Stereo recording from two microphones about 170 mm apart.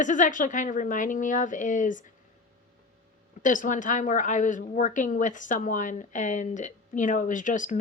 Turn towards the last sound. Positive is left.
turn(degrees=45)  # may be behind; listen again after turning